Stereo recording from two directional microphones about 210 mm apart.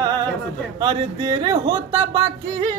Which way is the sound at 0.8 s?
20° right (ahead or behind).